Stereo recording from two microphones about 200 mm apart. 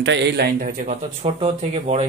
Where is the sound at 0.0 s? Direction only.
60° right (ahead or behind).